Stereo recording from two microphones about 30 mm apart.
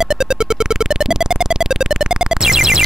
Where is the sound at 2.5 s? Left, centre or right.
Centre.